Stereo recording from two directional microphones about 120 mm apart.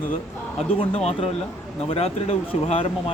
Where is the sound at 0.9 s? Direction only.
55° left (ahead or behind).